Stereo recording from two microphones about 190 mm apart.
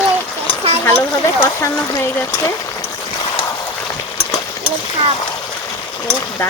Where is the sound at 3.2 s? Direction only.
20° left (ahead or behind).